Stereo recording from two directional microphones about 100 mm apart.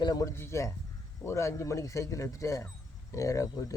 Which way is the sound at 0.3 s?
25° left (ahead or behind).